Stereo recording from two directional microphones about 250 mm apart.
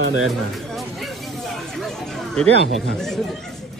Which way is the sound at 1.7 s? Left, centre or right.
Centre.